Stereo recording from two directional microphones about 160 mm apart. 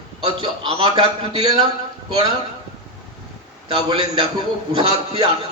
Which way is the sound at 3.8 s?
25° right (ahead or behind).